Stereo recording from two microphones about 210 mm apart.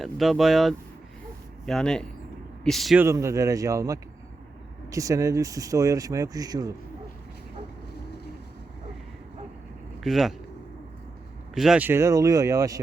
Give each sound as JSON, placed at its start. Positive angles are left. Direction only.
{"t": 0.0, "sound": "speech", "side_deg": 0}
{"t": 3.0, "sound": "speech", "side_deg": -15}
{"t": 10.0, "sound": "speech", "side_deg": 0}
{"t": 11.5, "sound": "speech", "side_deg": -5}